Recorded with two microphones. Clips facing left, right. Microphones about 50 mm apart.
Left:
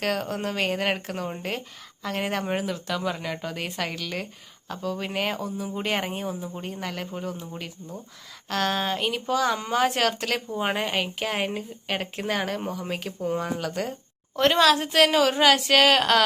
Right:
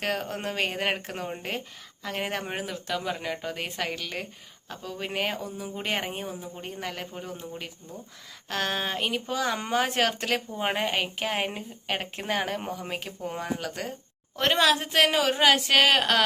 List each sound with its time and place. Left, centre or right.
0.0 s speech: centre
8.4 s speech: centre
13.4 s speech: centre